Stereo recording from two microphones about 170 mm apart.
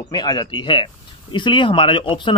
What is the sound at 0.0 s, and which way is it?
Speech, 25° left (ahead or behind).